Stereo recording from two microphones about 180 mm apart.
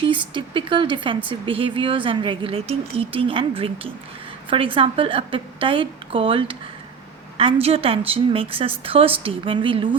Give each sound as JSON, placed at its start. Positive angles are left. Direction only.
{"t": 0.0, "sound": "a woman's voice", "side_deg": -25}